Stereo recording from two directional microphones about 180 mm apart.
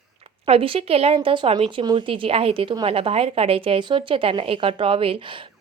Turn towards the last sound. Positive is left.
turn(degrees=-30)  # may be behind; listen again after turning